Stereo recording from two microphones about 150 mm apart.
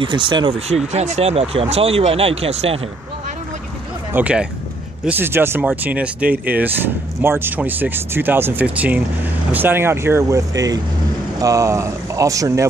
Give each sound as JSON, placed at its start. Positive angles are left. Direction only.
{"t": 0.0, "sound": "speech", "side_deg": -35}
{"t": 0.9, "sound": "speech", "side_deg": -45}
{"t": 4.1, "sound": "speech", "side_deg": -10}